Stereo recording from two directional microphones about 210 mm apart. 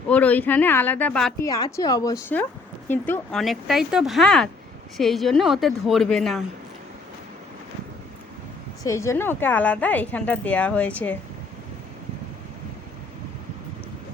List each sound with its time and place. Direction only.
0.1 s a woman's voice: 10° left (ahead or behind)
1.5 s a woman's voice: 20° left (ahead or behind); by 6.4 s centre (ahead or behind)
8.8 s a woman's voice: 15° left (ahead or behind)